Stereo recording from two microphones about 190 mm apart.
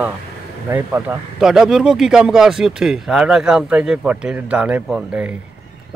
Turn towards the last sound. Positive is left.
turn(degrees=-5)  # may be behind; listen again after turning